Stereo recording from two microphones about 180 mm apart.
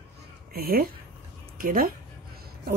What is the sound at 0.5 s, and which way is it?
Speech, 55° right (ahead or behind).